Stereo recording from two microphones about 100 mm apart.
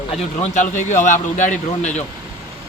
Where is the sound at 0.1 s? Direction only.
90° left.